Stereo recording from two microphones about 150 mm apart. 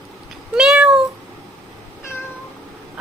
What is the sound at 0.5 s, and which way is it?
Meow, 5° right (ahead or behind).